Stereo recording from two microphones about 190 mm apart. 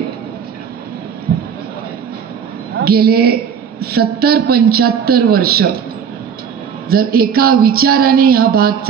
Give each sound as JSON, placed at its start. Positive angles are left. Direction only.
{"t": 2.8, "sound": "a woman's voice", "side_deg": -55}
{"t": 6.9, "sound": "a man's voice", "side_deg": -50}